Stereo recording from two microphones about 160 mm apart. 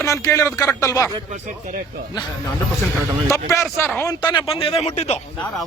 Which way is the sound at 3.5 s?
15° left (ahead or behind).